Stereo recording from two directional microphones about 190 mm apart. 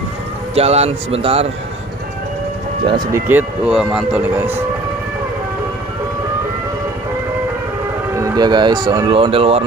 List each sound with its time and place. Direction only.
0.6 s speech: 35° right (ahead or behind)
2.8 s speech: 25° right (ahead or behind)
3.3 s speech: 5° right (ahead or behind)
8.2 s speech: 25° right (ahead or behind)